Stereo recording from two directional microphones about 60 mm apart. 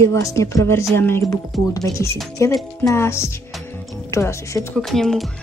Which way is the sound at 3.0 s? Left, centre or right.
Left.